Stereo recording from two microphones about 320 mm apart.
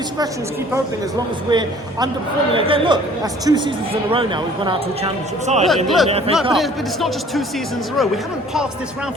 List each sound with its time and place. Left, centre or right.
1.5 s speech: centre
5.6 s speech: centre
6.1 s speech: centre
6.5 s speech: centre